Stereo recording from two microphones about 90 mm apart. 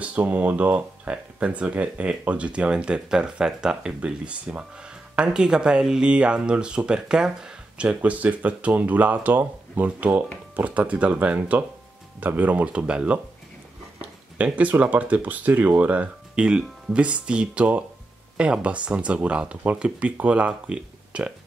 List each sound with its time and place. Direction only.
0.0 s speech: 15° right (ahead or behind)
14.4 s speech: 15° right (ahead or behind)